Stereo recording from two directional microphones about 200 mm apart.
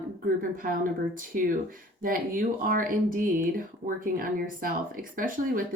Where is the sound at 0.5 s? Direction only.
45° right (ahead or behind).